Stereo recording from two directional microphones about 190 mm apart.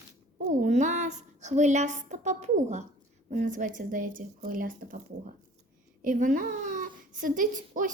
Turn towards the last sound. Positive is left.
turn(degrees=-45)  # may be behind; listen again after turning